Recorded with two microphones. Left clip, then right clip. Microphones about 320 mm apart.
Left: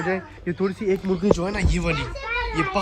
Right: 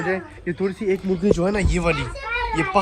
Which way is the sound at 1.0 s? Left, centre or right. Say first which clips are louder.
Right 3 dB; left.